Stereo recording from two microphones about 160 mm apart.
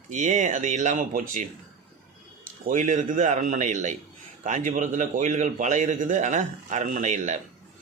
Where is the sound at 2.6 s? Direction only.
50° right (ahead or behind).